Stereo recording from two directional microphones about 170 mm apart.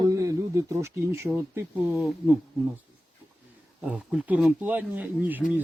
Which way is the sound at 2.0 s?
5° right (ahead or behind).